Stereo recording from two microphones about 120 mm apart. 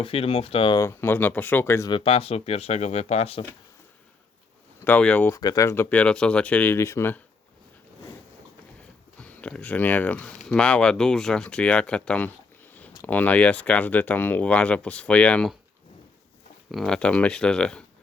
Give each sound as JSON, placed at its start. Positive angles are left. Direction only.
{"t": 0.0, "sound": "speech", "side_deg": 50}
{"t": 0.8, "sound": "speech", "side_deg": 20}
{"t": 1.9, "sound": "speech", "side_deg": 55}
{"t": 4.9, "sound": "speech", "side_deg": 10}
{"t": 5.3, "sound": "speech", "side_deg": 30}
{"t": 9.2, "sound": "speech", "side_deg": 10}
{"t": 16.7, "sound": "speech", "side_deg": 5}